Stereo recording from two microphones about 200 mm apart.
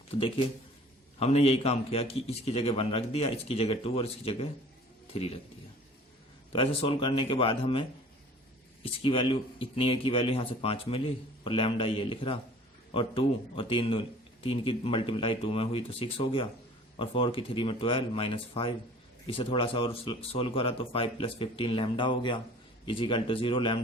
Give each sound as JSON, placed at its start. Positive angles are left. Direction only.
{"t": 0.1, "sound": "speech", "side_deg": 25}
{"t": 6.5, "sound": "speech", "side_deg": 25}